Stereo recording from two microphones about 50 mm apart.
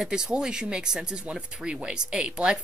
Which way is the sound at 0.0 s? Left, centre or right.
Centre.